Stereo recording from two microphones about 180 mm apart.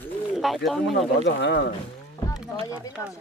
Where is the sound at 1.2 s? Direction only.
75° left (ahead or behind).